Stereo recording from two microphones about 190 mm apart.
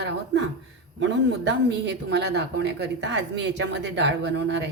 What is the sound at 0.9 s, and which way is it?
Speech, 70° right (ahead or behind).